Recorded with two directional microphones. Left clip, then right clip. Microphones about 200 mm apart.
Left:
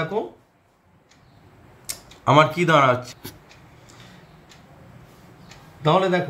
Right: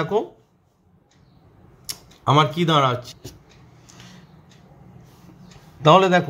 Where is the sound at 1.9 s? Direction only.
25° right (ahead or behind).